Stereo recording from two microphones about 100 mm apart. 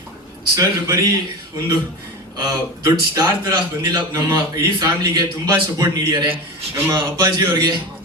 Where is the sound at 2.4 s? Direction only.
40° right (ahead or behind).